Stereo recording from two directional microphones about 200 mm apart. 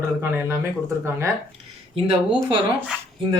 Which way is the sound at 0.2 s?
10° right (ahead or behind).